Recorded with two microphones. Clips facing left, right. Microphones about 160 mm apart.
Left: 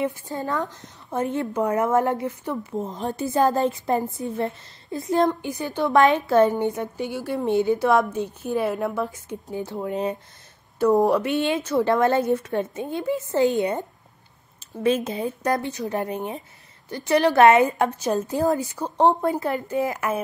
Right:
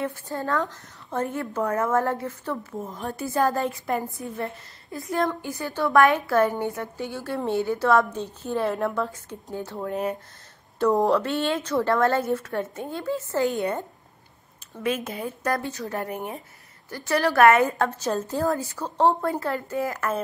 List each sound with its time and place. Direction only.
0.0 s a woman's voice: 15° left (ahead or behind)